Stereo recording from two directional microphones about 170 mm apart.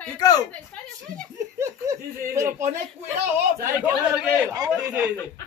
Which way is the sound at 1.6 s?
15° right (ahead or behind).